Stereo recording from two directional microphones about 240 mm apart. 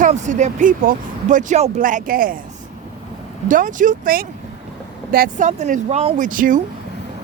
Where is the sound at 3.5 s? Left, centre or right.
Right.